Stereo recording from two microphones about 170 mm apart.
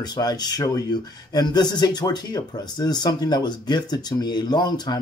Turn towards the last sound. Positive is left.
turn(degrees=25)  # may be behind; listen again after turning